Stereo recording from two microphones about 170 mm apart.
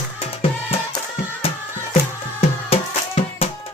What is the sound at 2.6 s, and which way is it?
Music, 35° left (ahead or behind).